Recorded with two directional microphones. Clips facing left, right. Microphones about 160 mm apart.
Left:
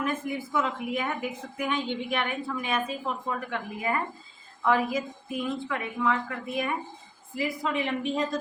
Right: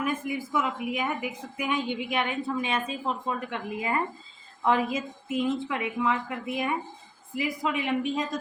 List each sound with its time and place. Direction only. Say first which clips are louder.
0.0 s a woman's voice: even; 10° right (ahead or behind)